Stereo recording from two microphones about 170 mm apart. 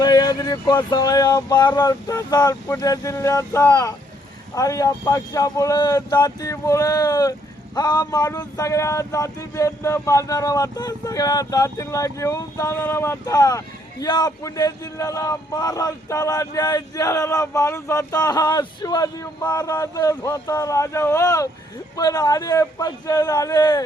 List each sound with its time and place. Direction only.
0.0 s speech: 25° left (ahead or behind)